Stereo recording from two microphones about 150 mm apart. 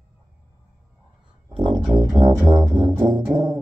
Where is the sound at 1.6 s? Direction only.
30° right (ahead or behind).